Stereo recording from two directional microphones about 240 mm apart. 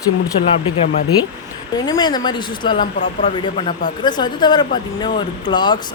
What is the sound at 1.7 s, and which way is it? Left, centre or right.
Speech, centre.